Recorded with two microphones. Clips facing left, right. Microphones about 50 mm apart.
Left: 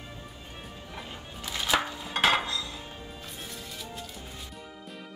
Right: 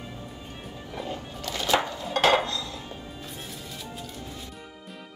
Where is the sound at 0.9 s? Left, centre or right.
Centre.